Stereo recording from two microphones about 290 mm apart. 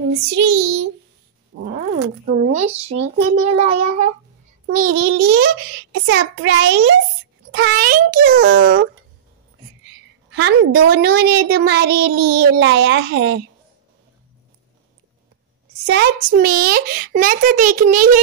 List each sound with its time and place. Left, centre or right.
0.1 s a child's voice: right
10.3 s a child's voice: right
15.8 s a child's voice: right